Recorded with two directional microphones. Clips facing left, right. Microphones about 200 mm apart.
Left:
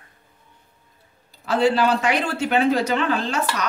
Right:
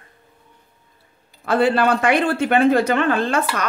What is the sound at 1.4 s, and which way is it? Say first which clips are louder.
Speech: right 2 dB; 55° right (ahead or behind).